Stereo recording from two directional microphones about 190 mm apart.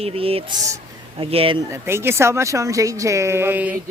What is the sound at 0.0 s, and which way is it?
Speech, 30° right (ahead or behind).